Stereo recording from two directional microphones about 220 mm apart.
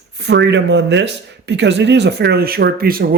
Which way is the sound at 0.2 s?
55° right (ahead or behind).